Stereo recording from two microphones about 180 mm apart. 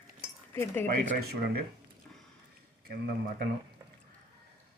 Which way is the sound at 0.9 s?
55° right (ahead or behind).